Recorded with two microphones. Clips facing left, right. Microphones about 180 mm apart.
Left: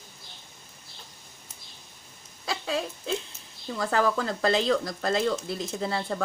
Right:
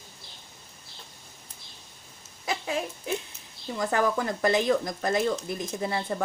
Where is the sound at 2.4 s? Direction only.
20° right (ahead or behind).